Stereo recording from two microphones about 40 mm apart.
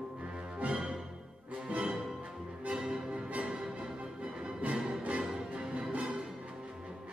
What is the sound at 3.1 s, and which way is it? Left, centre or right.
Music, right.